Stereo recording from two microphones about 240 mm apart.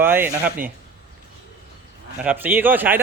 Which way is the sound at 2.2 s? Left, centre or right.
Centre.